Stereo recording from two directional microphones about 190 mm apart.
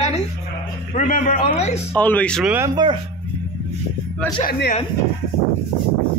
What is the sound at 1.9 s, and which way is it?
Speech, 10° left (ahead or behind).